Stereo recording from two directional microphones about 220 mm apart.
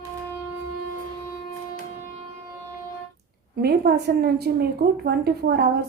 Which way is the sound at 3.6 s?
45° right (ahead or behind).